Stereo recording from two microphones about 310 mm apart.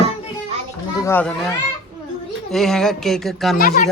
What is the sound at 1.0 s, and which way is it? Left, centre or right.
Speech, centre.